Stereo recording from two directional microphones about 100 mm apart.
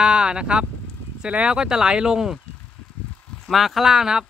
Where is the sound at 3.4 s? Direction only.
Centre (ahead or behind).